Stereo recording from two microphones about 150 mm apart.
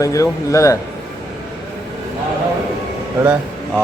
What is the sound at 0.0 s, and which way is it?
Speech, 20° left (ahead or behind).